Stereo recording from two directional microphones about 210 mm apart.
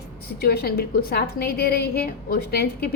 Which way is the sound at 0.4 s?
45° left (ahead or behind).